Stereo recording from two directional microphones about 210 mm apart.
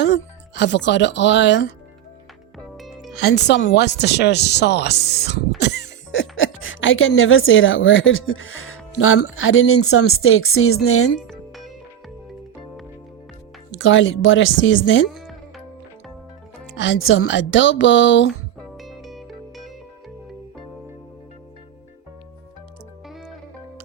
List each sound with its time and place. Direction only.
0.0 s speech: 55° left (ahead or behind)
2.7 s music: centre (ahead or behind)
3.1 s speech: 50° left (ahead or behind); by 11.1 s 90° left
11.3 s music: centre (ahead or behind)
13.7 s speech: 65° left (ahead or behind)
15.1 s music: centre (ahead or behind)
16.7 s speech: 60° left (ahead or behind)
18.8 s music: centre (ahead or behind)